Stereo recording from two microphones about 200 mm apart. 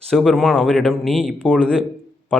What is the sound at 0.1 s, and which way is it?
A man's voice, centre (ahead or behind).